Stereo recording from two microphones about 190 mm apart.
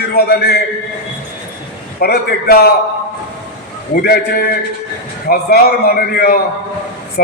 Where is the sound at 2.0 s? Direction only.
55° left (ahead or behind).